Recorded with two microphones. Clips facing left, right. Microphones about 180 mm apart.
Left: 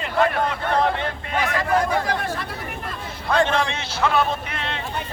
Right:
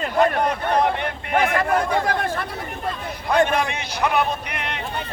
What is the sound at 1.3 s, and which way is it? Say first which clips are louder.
Speech: right 5 dB; 55° right (ahead or behind).